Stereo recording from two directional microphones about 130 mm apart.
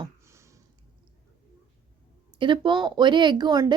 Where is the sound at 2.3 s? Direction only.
40° right (ahead or behind).